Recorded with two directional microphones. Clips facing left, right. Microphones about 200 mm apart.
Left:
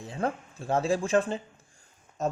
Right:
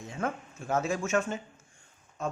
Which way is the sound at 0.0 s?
30° left (ahead or behind).